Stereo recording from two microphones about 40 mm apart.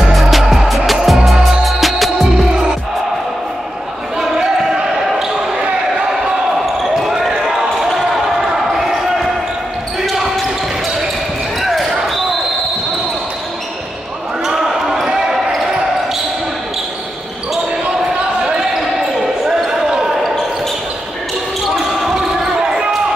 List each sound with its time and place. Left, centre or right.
0.1 s music: centre
6.6 s basketball bounce: centre
14.4 s basketball bounce: centre
19.7 s basketball bounce: centre
22.0 s basketball bounce: centre